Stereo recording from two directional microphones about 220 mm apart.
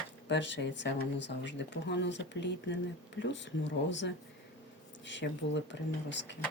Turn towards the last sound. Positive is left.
turn(degrees=55)  # may be behind; listen again after turning